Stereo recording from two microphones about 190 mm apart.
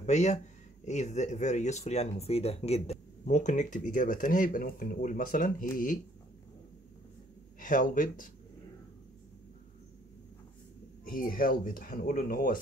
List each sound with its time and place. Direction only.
0.0 s speech: 35° left (ahead or behind)
7.6 s speech: 45° left (ahead or behind)
11.1 s speech: 50° left (ahead or behind)